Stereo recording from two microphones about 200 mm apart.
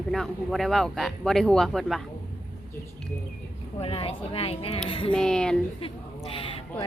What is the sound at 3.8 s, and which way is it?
Speech, 30° left (ahead or behind).